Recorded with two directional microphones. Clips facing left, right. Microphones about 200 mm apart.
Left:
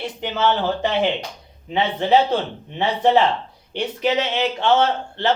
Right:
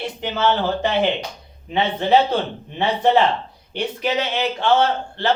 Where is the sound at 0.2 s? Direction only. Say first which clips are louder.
Even; 15° left (ahead or behind).